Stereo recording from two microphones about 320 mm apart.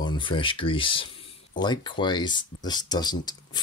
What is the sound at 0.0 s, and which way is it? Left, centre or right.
Speech, centre.